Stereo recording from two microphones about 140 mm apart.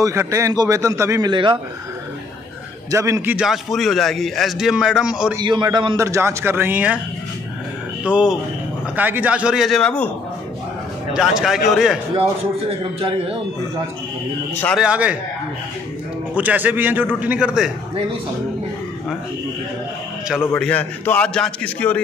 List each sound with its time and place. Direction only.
0.0 s a man's voice: 20° right (ahead or behind)
1.3 s a man's voice: 35° right (ahead or behind)
2.9 s a man's voice: 20° right (ahead or behind)
3.4 s a man's voice: centre (ahead or behind)
5.3 s a man's voice: 30° right (ahead or behind)
5.9 s a man's voice: 20° right (ahead or behind)
8.0 s a man's voice: 5° right (ahead or behind)
11.1 s a man's voice: 5° right (ahead or behind)
12.2 s a man's voice: 45° right (ahead or behind)
14.8 s a man's voice: 10° right (ahead or behind)
16.3 s a man's voice: 10° right (ahead or behind)
20.2 s a man's voice: 5° right (ahead or behind)
20.6 s a man's voice: 10° left (ahead or behind)